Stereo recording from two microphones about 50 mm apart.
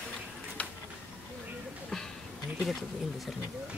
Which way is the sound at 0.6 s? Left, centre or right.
Left.